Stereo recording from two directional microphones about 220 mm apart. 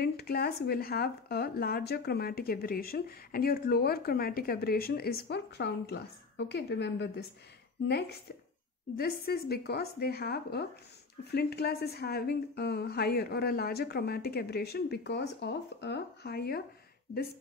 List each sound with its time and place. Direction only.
0.0 s speech: 45° left (ahead or behind)
8.9 s speech: 45° left (ahead or behind)